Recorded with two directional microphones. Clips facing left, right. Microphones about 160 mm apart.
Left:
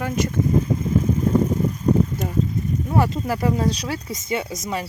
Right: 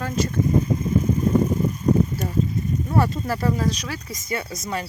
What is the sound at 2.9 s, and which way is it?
Speech, 15° left (ahead or behind).